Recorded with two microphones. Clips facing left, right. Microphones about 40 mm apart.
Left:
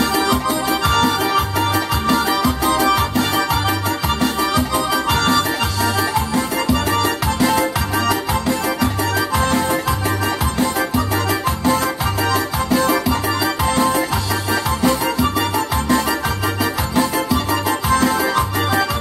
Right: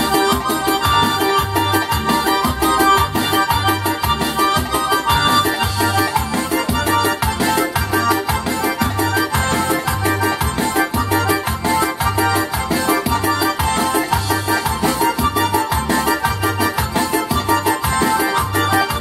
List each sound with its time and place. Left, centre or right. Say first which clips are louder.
0.0 s music: right 1 dB; centre
9.7 s music: right 1 dB; right
10.8 s keyboard: right 2 dB; right
12.2 s music: right 1 dB; centre
14.5 s music: left 2 dB; centre